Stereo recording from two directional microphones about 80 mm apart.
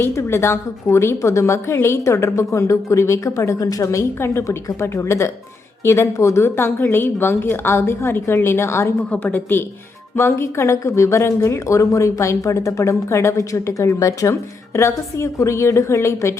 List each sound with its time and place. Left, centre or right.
0.0 s speech: left
9.0 s a woman's voice: centre; by 16.3 s left